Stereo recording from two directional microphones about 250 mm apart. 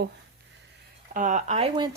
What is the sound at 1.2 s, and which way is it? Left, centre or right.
Speech, right.